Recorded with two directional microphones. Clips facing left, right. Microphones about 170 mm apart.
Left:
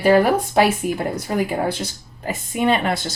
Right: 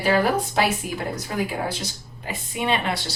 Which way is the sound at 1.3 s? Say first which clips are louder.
Left 6 dB; 55° left (ahead or behind).